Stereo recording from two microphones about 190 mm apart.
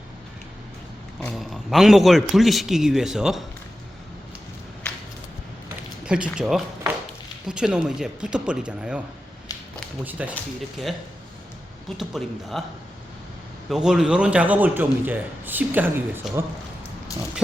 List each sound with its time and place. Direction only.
1.2 s a man's voice: centre (ahead or behind)
6.1 s a man's voice: 5° right (ahead or behind)
10.0 s a man's voice: 10° right (ahead or behind)
11.9 s a man's voice: centre (ahead or behind)
13.7 s a man's voice: 5° right (ahead or behind)